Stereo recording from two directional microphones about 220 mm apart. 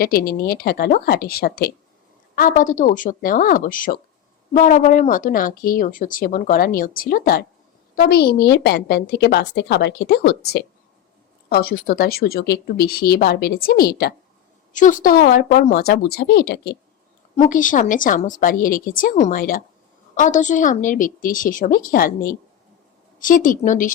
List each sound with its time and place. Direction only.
0.0 s a woman's voice: 40° left (ahead or behind)
17.3 s speech: 35° left (ahead or behind)
23.2 s speech: 40° left (ahead or behind)